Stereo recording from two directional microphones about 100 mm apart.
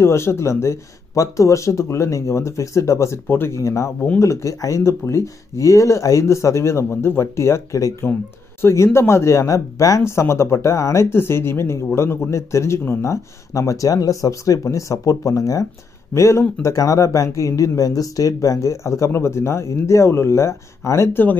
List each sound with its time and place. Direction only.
0.0 s speech: 25° left (ahead or behind)